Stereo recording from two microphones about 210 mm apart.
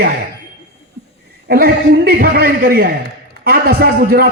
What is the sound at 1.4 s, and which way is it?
A man's voice, 45° right (ahead or behind).